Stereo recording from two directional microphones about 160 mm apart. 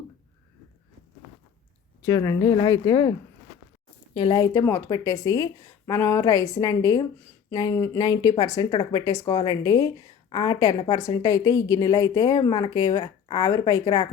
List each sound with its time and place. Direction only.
2.0 s a woman's voice: 20° left (ahead or behind)
13.0 s speech: 35° left (ahead or behind)
13.4 s a woman's voice: 20° left (ahead or behind)